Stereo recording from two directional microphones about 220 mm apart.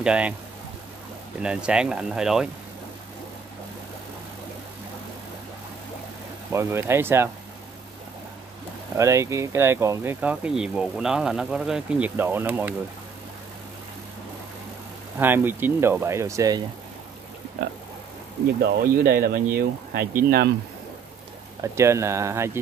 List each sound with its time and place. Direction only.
0.0 s speech: 5° right (ahead or behind)
1.4 s speech: 5° right (ahead or behind)
6.5 s speech: 10° right (ahead or behind)
8.9 s speech: 15° right (ahead or behind)
15.1 s speech: 10° right (ahead or behind)
18.6 s speech: 45° right (ahead or behind)
21.7 s speech: 15° right (ahead or behind)